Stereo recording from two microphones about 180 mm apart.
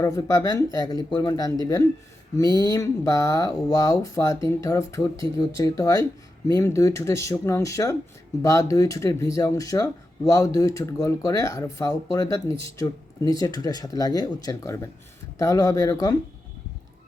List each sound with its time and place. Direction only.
0.0 s speech: 20° left (ahead or behind)